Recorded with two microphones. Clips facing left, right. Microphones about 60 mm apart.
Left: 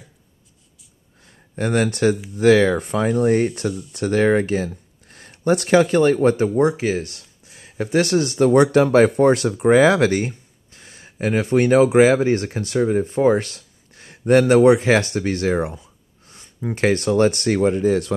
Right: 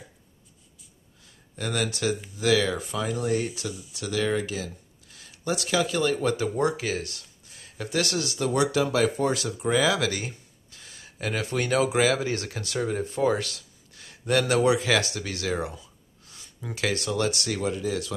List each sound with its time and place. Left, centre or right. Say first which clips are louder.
1.2 s a sound: left 9 dB; left
2.3 s speech: left 9 dB; left
6.2 s speech: left 8 dB; left